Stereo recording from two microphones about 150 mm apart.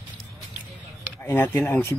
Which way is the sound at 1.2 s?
15° left (ahead or behind).